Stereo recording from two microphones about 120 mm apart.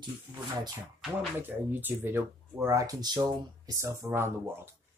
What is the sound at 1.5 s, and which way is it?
Speech, 15° right (ahead or behind).